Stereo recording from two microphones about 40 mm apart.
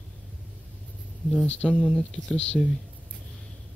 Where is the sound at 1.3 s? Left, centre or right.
Left.